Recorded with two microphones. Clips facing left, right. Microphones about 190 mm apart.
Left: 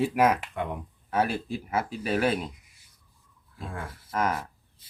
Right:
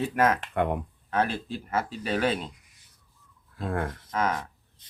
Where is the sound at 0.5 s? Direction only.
60° right (ahead or behind).